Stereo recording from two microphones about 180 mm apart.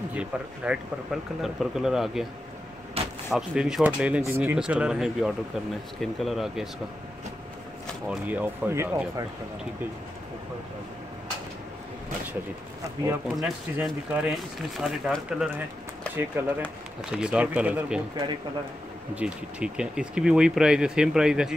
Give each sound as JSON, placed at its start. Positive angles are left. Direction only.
{"t": 0.1, "sound": "speech", "side_deg": -5}
{"t": 3.0, "sound": "door", "side_deg": -35}
{"t": 3.3, "sound": "speech", "side_deg": 0}
{"t": 8.3, "sound": "speech", "side_deg": -10}
{"t": 13.3, "sound": "speech", "side_deg": 0}
{"t": 19.1, "sound": "speech", "side_deg": -5}